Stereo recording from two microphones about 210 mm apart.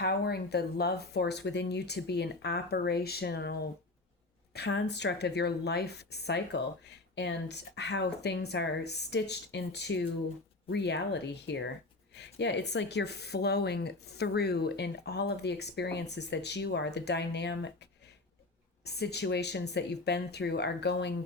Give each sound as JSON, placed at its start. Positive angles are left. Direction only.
{"t": 0.0, "sound": "speech", "side_deg": 50}
{"t": 18.9, "sound": "speech", "side_deg": 50}